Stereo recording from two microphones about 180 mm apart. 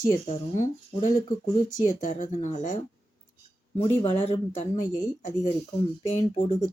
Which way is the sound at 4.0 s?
30° left (ahead or behind).